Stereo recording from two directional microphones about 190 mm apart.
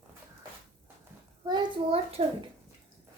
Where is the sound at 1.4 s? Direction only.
25° right (ahead or behind).